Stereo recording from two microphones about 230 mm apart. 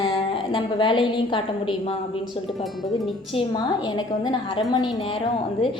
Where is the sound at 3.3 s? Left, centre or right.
Left.